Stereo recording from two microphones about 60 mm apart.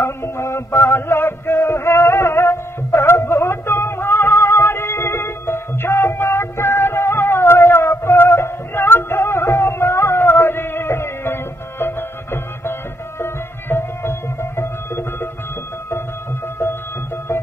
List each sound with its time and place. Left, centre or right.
0.0 s music: left